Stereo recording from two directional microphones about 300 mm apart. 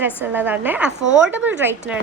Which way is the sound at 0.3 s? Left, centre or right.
Centre.